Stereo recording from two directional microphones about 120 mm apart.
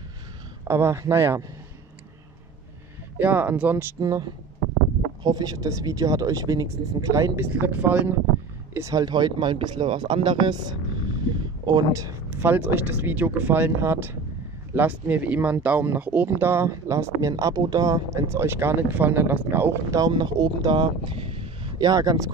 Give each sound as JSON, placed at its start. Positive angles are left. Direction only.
{"t": 0.7, "sound": "speech", "side_deg": -20}
{"t": 3.2, "sound": "speech", "side_deg": -15}
{"t": 4.0, "sound": "speech", "side_deg": -30}
{"t": 7.4, "sound": "speech", "side_deg": -15}
{"t": 8.7, "sound": "speech", "side_deg": -30}
{"t": 20.0, "sound": "speech", "side_deg": -35}
{"t": 21.8, "sound": "speech", "side_deg": -30}